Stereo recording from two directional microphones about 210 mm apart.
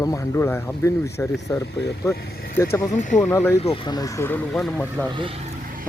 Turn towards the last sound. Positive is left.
turn(degrees=-25)  # may be behind; listen again after turning